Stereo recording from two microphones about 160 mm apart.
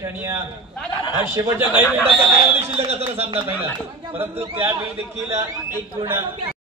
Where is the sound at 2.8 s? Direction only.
40° right (ahead or behind).